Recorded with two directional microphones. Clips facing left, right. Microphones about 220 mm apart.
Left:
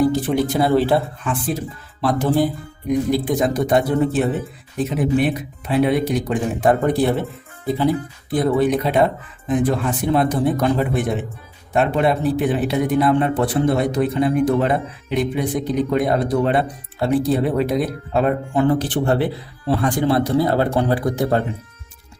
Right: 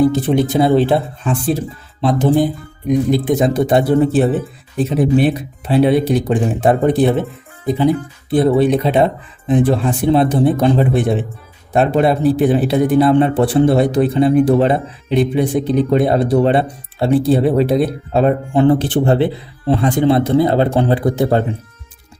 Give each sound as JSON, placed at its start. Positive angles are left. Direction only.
{"t": 0.0, "sound": "a man's voice", "side_deg": -25}